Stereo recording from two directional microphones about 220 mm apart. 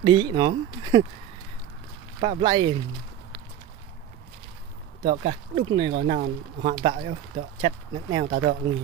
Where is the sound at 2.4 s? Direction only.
20° right (ahead or behind).